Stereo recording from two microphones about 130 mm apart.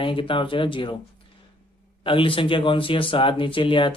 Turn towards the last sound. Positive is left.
turn(degrees=40)  # may be behind; listen again after turning